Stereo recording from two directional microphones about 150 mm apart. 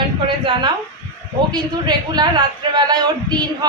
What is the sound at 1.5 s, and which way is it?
A woman's voice, 30° right (ahead or behind).